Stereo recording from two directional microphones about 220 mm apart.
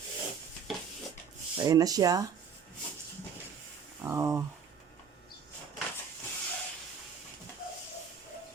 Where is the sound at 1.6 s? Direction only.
15° right (ahead or behind).